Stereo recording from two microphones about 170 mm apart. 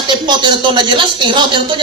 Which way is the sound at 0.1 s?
25° right (ahead or behind).